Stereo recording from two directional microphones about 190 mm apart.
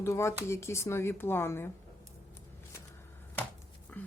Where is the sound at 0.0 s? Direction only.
15° left (ahead or behind).